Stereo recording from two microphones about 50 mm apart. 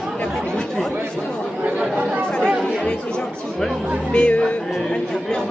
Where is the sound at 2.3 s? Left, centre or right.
Centre.